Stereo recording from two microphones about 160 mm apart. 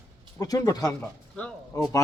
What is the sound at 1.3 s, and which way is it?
Speech, 10° left (ahead or behind).